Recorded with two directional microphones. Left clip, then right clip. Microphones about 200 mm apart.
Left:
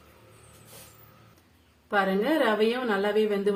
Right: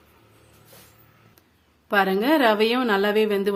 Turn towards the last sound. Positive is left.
turn(degrees=-55)  # may be behind; listen again after turning